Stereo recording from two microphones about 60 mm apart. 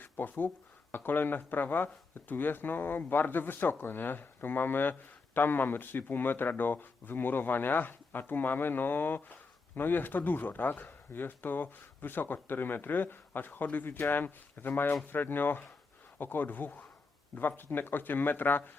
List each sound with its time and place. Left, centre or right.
0.0 s speech: left